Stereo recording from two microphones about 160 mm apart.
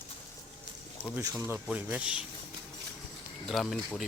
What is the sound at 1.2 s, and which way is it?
Speech, 20° right (ahead or behind).